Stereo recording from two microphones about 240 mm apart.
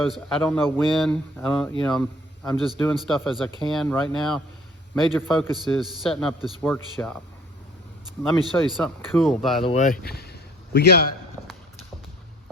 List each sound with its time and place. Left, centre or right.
0.0 s speech: centre
8.7 s speech: centre
9.6 s speech: left
10.1 s a sound: left